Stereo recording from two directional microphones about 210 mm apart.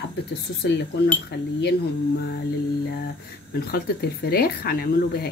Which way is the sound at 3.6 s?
45° left (ahead or behind).